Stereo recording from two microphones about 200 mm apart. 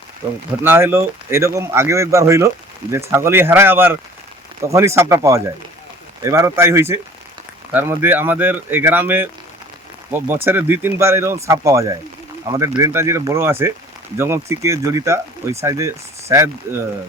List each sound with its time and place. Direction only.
0.6 s speech: 10° right (ahead or behind)